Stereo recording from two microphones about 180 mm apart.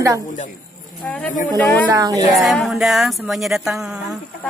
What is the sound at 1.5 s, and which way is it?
Speech, 10° left (ahead or behind).